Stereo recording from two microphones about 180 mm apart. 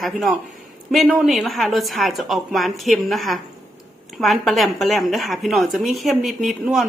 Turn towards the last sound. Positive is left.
turn(degrees=0)  # may be behind; listen again after turning